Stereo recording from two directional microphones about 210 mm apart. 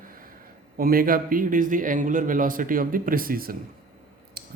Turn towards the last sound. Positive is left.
turn(degrees=-45)  # may be behind; listen again after turning